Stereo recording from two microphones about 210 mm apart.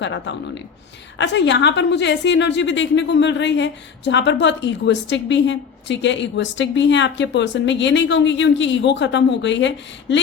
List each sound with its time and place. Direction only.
0.0 s a woman's voice: 60° left (ahead or behind)